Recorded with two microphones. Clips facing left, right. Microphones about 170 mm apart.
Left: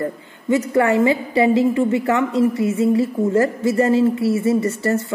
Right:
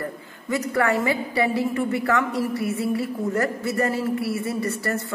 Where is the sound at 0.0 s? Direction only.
25° left (ahead or behind).